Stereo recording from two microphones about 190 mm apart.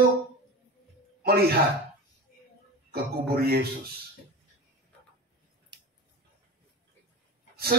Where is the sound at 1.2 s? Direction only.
55° right (ahead or behind).